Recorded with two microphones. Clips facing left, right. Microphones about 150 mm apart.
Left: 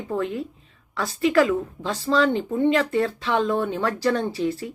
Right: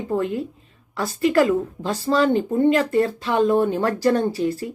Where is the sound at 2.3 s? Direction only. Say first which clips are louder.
Right 3 dB; 45° right (ahead or behind).